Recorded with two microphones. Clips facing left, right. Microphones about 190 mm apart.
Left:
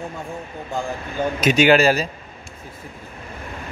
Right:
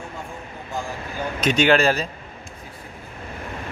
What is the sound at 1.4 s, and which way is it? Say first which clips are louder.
Speech: left 3 dB; 5° left (ahead or behind).